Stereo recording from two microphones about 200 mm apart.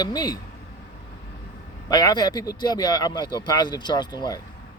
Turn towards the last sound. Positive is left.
turn(degrees=20)  # may be behind; listen again after turning